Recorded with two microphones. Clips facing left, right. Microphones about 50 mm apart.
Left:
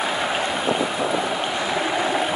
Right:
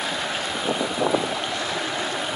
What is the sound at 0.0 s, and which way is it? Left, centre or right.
Stream, centre.